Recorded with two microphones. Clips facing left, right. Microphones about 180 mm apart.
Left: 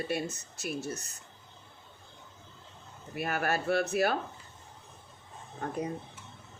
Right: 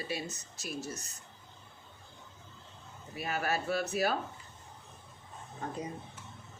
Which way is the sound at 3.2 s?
55° left (ahead or behind).